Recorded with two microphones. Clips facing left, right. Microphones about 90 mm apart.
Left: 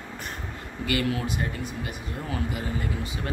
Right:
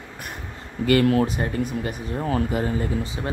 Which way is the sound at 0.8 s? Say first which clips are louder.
Right 9 dB; 45° right (ahead or behind).